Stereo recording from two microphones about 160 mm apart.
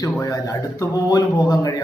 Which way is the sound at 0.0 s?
20° left (ahead or behind).